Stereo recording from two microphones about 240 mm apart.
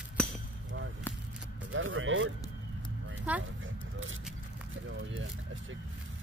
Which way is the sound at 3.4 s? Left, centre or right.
Right.